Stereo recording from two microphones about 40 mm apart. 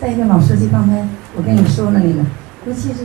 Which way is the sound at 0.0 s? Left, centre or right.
Centre.